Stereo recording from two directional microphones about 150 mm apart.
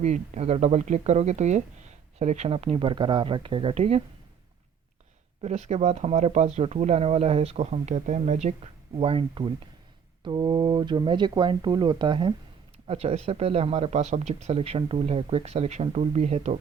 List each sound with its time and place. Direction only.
0.0 s speech: 50° right (ahead or behind)
5.4 s speech: 50° right (ahead or behind); by 12.3 s 30° right (ahead or behind)
12.9 s speech: 45° right (ahead or behind)